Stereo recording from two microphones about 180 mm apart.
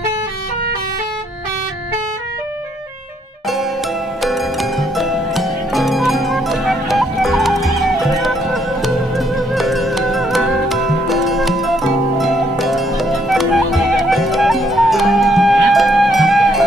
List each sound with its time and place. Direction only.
4.2 s pizzicato: centre (ahead or behind)